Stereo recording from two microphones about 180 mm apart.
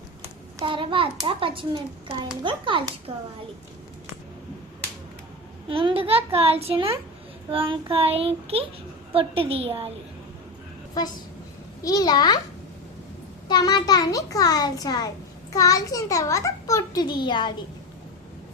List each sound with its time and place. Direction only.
0.2 s a child's voice: 30° right (ahead or behind)
5.6 s a woman's voice: 30° right (ahead or behind)
11.8 s a child's voice: 20° left (ahead or behind)
13.5 s a child's voice: 20° left (ahead or behind)